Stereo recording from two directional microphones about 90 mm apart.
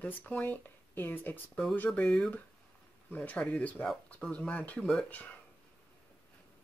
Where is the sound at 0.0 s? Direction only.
20° left (ahead or behind).